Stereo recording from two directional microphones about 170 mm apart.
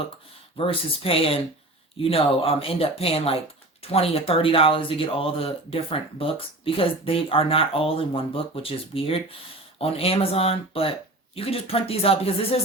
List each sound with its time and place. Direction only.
0.5 s speech: 35° left (ahead or behind)